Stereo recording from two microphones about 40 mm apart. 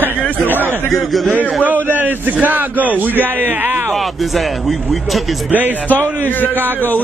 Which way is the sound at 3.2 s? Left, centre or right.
Right.